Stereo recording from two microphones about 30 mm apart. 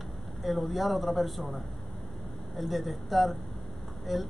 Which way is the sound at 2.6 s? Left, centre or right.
Centre.